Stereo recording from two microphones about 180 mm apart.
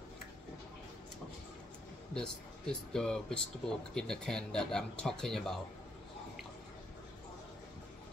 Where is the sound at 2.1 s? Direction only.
5° left (ahead or behind).